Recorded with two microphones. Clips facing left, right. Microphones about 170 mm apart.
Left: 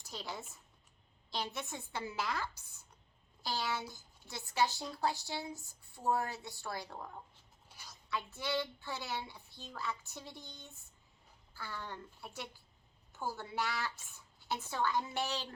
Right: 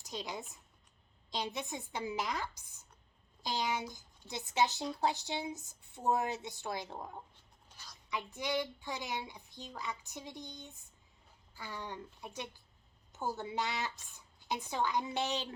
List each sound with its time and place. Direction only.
0.0 s speech: 15° right (ahead or behind)
1.3 s child singing: 15° right (ahead or behind)
3.4 s a woman's voice: 15° right (ahead or behind)
7.7 s a sound: 10° left (ahead or behind)
8.1 s child singing: 15° right (ahead or behind)
13.1 s a woman's voice: 20° right (ahead or behind)